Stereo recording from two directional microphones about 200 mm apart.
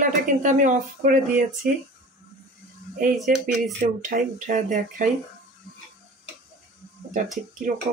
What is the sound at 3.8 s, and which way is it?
Speech, 40° right (ahead or behind).